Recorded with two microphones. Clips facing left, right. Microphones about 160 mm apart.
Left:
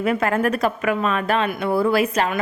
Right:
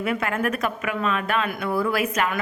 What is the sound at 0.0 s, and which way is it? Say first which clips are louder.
A woman's voice: left 5 dB; 40° left (ahead or behind).